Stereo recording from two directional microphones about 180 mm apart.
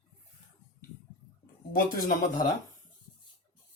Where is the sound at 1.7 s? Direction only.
45° left (ahead or behind).